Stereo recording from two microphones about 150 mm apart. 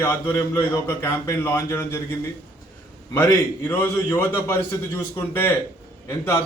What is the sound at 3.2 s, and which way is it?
A man's voice, 15° left (ahead or behind).